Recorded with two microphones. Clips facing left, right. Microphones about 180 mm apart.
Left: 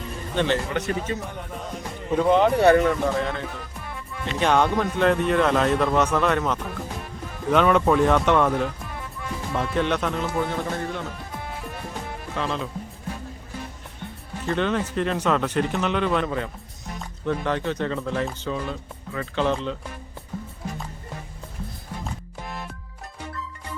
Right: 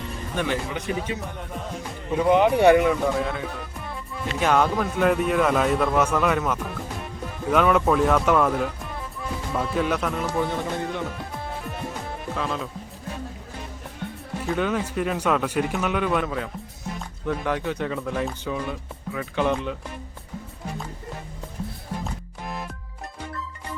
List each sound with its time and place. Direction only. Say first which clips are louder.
0.3 s a man's voice: left 3 dB; 10° right (ahead or behind)
10.5 s speech: even; 15° right (ahead or behind)
12.4 s a man's voice: left 2 dB; 5° right (ahead or behind)
14.4 s speech: left 1 dB; 5° right (ahead or behind)
22.0 s music: right 1 dB; centre (ahead or behind)